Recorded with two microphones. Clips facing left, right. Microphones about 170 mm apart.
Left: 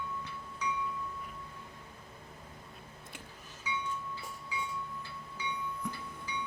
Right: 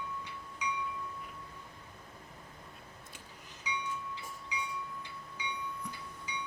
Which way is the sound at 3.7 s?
15° right (ahead or behind).